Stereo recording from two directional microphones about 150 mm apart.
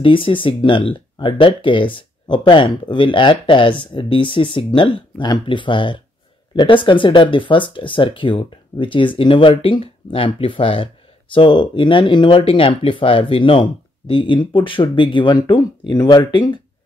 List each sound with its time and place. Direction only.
0.0 s speech: 35° left (ahead or behind)